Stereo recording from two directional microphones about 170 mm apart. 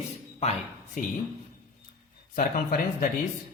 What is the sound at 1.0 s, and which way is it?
Speech, 50° left (ahead or behind).